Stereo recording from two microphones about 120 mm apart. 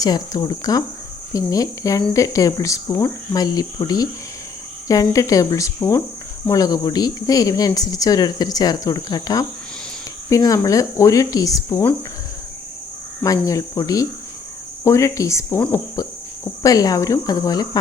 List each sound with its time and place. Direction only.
0.0 s speech: 35° left (ahead or behind)
13.2 s speech: 30° left (ahead or behind)